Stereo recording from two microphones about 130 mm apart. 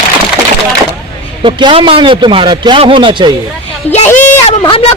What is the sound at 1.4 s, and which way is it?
A man's voice, 45° right (ahead or behind).